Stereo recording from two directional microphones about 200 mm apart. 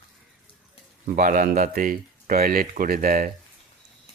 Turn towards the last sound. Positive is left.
turn(degrees=-45)  # may be behind; listen again after turning